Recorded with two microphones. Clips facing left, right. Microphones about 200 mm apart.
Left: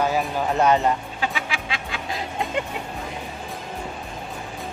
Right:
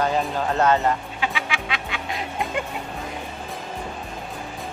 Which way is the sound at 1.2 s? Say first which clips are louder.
Even; 35° left (ahead or behind).